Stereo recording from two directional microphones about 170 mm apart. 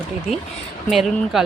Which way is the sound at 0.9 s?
Centre (ahead or behind).